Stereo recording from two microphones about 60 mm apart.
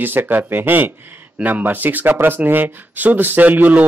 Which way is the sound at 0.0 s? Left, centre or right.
Right.